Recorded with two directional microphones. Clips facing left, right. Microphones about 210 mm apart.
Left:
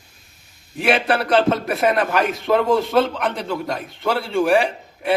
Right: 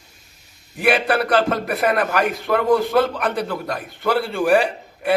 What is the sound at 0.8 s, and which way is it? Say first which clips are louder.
A man's voice: even; 25° left (ahead or behind).